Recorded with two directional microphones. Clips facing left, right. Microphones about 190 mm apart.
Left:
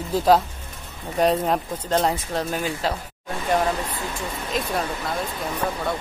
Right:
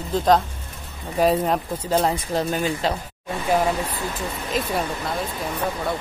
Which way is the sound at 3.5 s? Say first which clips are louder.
Right 1 dB; 10° right (ahead or behind).